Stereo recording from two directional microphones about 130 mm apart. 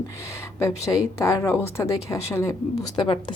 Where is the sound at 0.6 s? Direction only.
25° left (ahead or behind).